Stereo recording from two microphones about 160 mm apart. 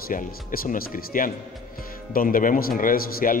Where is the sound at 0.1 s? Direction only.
60° left (ahead or behind).